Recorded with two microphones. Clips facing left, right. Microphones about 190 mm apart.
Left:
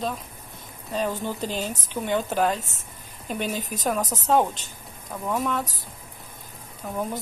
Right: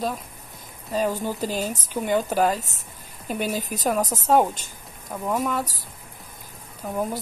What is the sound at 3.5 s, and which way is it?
Speech, 40° right (ahead or behind).